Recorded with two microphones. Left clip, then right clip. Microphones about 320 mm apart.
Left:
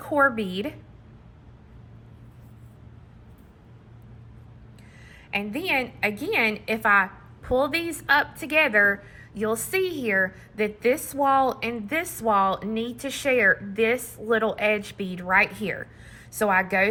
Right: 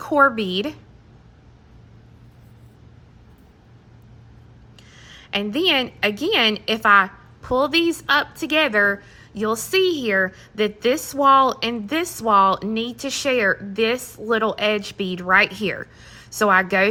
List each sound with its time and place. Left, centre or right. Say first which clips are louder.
0.1 s speech: right 5 dB; centre
4.9 s a sound: right 7 dB; right
5.5 s speech: right 8 dB; centre